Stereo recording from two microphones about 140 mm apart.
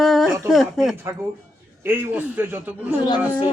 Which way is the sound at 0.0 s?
Centre (ahead or behind).